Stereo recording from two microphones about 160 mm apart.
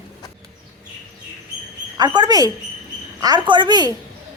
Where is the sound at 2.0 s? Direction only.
25° right (ahead or behind).